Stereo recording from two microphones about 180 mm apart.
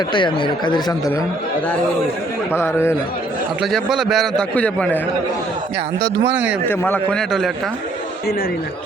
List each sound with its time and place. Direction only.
0.1 s speech: 25° left (ahead or behind)
2.6 s speech: 15° left (ahead or behind)
3.6 s a man's voice: centre (ahead or behind)
6.3 s speech: 10° right (ahead or behind)
6.7 s a man's voice: 10° left (ahead or behind)